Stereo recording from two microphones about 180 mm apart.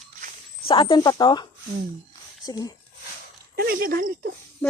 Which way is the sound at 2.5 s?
20° left (ahead or behind).